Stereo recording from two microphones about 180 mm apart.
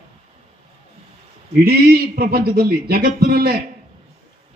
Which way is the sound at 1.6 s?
60° right (ahead or behind).